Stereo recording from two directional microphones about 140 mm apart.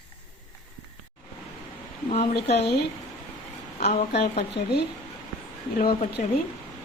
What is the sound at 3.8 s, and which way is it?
Speech, 55° left (ahead or behind).